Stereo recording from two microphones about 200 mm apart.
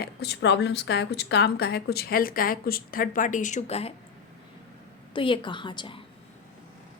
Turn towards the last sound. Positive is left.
turn(degrees=25)  # may be behind; listen again after turning